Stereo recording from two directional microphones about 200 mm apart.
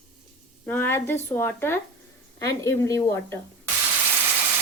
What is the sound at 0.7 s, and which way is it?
Stir, 10° left (ahead or behind).